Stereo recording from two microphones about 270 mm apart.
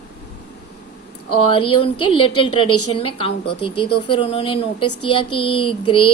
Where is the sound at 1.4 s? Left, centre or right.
Centre.